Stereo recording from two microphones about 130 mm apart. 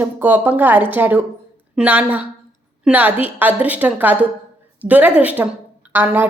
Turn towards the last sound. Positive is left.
turn(degrees=-15)  # may be behind; listen again after turning